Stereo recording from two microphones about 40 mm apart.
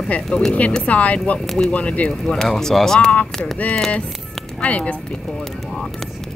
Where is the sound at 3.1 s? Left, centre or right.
Left.